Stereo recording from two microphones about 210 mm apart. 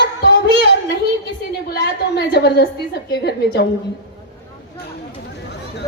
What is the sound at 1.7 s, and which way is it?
A woman's voice, 50° left (ahead or behind).